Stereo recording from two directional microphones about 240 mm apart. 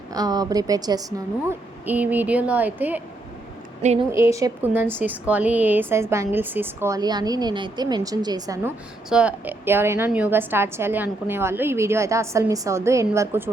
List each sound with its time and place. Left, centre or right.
0.1 s a woman's voice: centre
3.8 s a woman's voice: right
4.4 s a woman's voice: centre
9.0 s a woman's voice: centre